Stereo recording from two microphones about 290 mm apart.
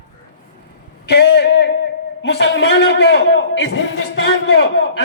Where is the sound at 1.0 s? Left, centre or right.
Left.